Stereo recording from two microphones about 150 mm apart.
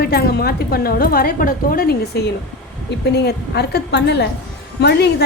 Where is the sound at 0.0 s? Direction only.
90° left.